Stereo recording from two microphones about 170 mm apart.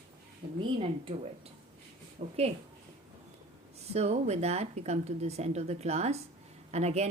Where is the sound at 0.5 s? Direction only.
30° right (ahead or behind).